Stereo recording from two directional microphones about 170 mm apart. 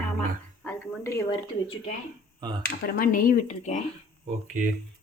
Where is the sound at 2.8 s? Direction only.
60° left (ahead or behind).